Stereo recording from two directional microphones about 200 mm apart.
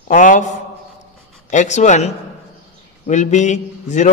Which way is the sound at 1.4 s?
35° left (ahead or behind).